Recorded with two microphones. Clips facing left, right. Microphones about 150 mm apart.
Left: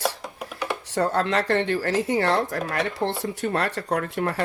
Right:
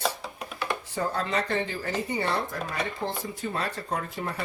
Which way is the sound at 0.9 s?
75° left (ahead or behind).